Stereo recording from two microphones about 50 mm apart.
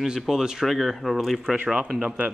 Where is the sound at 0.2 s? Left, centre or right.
Centre.